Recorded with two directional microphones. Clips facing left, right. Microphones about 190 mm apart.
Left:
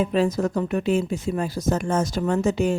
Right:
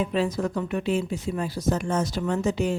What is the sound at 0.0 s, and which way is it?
Speech, 45° left (ahead or behind).